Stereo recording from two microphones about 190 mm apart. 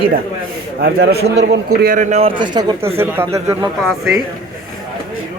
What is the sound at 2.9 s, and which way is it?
Speech, 15° right (ahead or behind).